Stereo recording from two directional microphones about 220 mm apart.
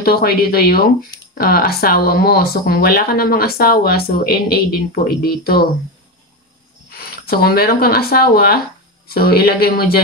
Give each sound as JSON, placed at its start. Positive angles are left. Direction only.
{"t": 0.0, "sound": "speech", "side_deg": 45}
{"t": 6.9, "sound": "speech", "side_deg": 45}